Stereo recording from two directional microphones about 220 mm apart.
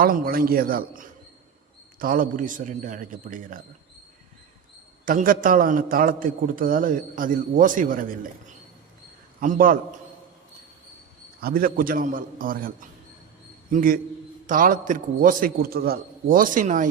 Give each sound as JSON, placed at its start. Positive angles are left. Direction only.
{"t": 0.0, "sound": "a man's voice", "side_deg": -40}
{"t": 5.0, "sound": "a man's voice", "side_deg": -40}
{"t": 9.4, "sound": "a man's voice", "side_deg": -40}
{"t": 11.3, "sound": "a man's voice", "side_deg": -40}